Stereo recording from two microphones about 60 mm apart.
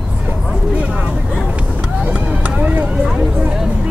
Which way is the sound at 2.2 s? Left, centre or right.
Right.